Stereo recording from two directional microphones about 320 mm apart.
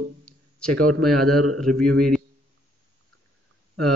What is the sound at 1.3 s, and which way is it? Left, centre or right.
Speech, right.